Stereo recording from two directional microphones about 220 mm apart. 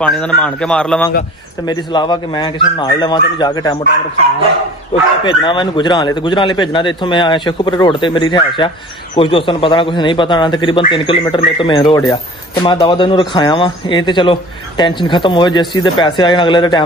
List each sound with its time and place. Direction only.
0.0 s a man's voice: 5° left (ahead or behind)
1.7 s a man's voice: 20° left (ahead or behind)
5.2 s a man's voice: 20° left (ahead or behind)